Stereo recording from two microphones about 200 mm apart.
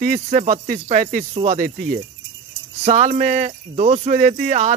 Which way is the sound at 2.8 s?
35° right (ahead or behind).